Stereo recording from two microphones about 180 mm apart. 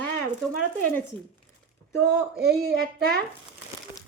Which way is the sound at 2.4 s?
60° right (ahead or behind).